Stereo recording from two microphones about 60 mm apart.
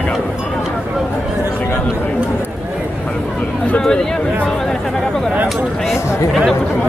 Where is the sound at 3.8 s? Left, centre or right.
Centre.